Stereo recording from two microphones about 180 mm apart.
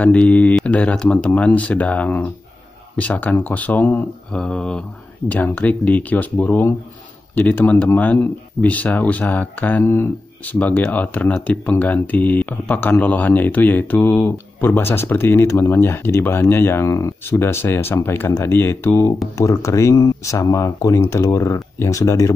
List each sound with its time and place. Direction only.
0.0 s speech: 5° left (ahead or behind)